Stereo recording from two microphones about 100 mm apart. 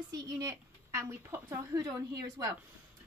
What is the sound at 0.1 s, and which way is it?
Speech, 40° right (ahead or behind).